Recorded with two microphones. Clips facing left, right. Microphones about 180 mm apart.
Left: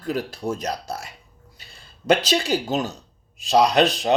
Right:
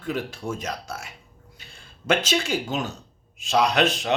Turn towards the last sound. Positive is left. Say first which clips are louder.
# left 4 dB
turn(degrees=35)  # may be behind; listen again after turning